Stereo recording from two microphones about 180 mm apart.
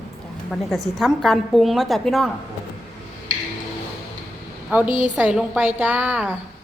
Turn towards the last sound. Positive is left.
turn(degrees=-10)  # may be behind; listen again after turning